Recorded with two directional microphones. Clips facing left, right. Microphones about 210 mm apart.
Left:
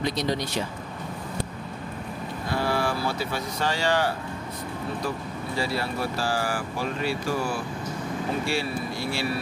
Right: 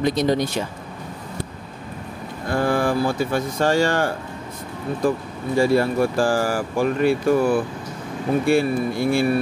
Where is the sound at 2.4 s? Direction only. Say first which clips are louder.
Right 6 dB; 50° right (ahead or behind).